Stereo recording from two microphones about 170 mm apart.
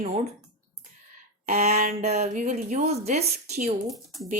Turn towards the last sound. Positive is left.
turn(degrees=0)  # may be behind; listen again after turning